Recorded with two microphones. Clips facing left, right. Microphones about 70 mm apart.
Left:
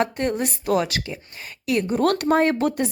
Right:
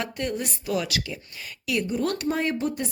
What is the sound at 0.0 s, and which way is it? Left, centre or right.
A woman's voice, left.